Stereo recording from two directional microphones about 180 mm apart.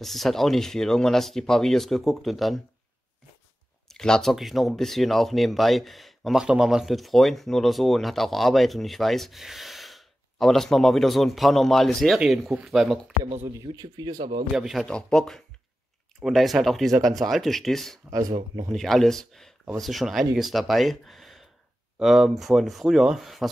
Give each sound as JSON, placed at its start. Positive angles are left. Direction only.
{"t": 0.0, "sound": "speech", "side_deg": 0}
{"t": 3.9, "sound": "speech", "side_deg": 5}
{"t": 13.5, "sound": "speech", "side_deg": -20}
{"t": 14.6, "sound": "speech", "side_deg": 0}
{"t": 18.1, "sound": "speech", "side_deg": -20}
{"t": 18.7, "sound": "speech", "side_deg": 0}